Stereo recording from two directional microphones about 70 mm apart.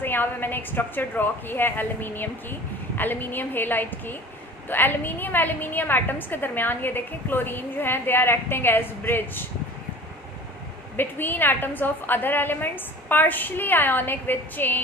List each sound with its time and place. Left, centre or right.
0.0 s a woman's voice: left
10.9 s a woman's voice: left